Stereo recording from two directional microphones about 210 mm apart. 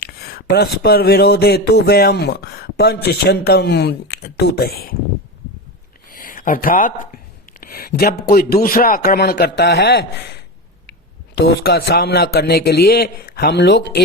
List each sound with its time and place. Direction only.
0.0 s speech: 45° left (ahead or behind)
6.1 s speech: 40° left (ahead or behind)
11.6 s speech: 50° left (ahead or behind)